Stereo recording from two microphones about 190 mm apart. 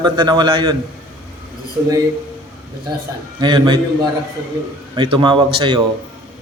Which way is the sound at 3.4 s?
25° right (ahead or behind).